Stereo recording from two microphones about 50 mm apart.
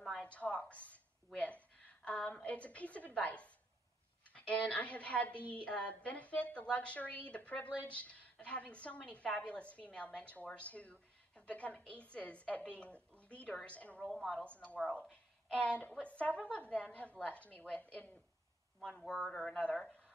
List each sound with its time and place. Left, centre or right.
0.2 s a woman's voice: left
18.8 s a woman's voice: centre